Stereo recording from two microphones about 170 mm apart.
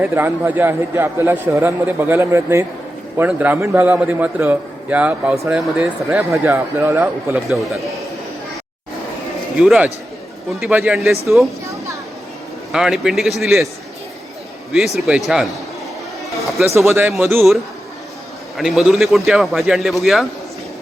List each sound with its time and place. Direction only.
0.0 s a man's voice: 15° right (ahead or behind)
9.6 s a man's voice: 5° right (ahead or behind)
11.6 s a sound: 20° right (ahead or behind)
12.7 s a man's voice: centre (ahead or behind)
14.7 s a man's voice: centre (ahead or behind)
16.6 s a man's voice: 15° right (ahead or behind)
18.5 s a man's voice: centre (ahead or behind)